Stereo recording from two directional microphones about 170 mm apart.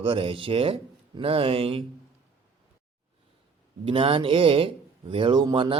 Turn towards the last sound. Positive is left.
turn(degrees=-30)  # may be behind; listen again after turning